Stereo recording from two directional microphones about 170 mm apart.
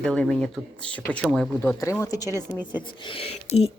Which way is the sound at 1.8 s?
15° left (ahead or behind).